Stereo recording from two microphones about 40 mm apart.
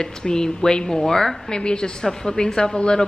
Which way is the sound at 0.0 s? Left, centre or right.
Centre.